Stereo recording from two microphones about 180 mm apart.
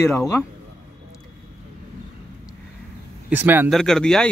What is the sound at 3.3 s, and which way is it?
Speech, 10° right (ahead or behind).